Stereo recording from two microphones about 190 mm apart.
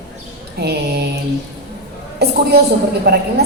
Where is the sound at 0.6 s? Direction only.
60° right (ahead or behind).